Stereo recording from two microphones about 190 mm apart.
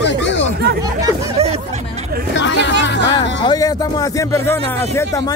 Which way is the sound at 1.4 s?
35° right (ahead or behind).